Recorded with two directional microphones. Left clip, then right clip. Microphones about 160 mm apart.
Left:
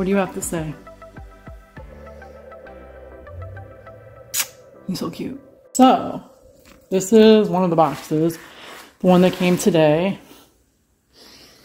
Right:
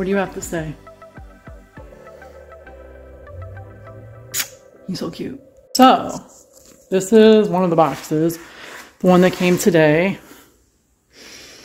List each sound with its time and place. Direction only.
0.0 s speech: 5° left (ahead or behind)
3.3 s music: centre (ahead or behind)
6.9 s speech: centre (ahead or behind)
11.1 s snort: 30° right (ahead or behind)